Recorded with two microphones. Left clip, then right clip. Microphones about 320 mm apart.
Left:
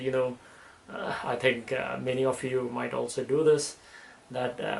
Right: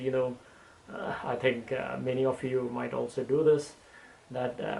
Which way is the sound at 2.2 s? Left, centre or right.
Centre.